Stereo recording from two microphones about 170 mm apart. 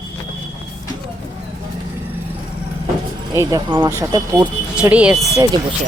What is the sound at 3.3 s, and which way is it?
Speech, 25° right (ahead or behind).